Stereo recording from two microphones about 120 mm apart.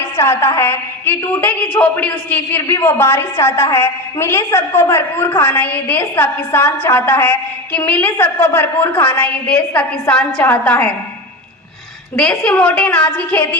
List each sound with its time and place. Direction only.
0.0 s a woman's voice: 20° left (ahead or behind)
12.1 s a woman's voice: 5° left (ahead or behind)